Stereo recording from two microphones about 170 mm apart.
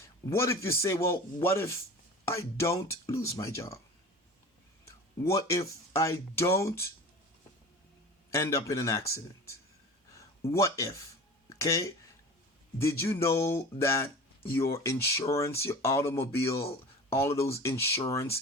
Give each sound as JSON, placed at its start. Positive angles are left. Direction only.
{"t": 0.3, "sound": "speech", "side_deg": 15}
{"t": 5.2, "sound": "speech", "side_deg": 20}
{"t": 8.3, "sound": "speech", "side_deg": 15}
{"t": 11.4, "sound": "a sound", "side_deg": 20}
{"t": 12.8, "sound": "speech", "side_deg": 15}